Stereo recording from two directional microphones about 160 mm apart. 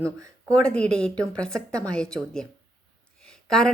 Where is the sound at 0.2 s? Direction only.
20° right (ahead or behind).